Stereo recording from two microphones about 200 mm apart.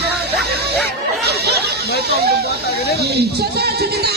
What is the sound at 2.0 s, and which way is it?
Speech, 55° right (ahead or behind).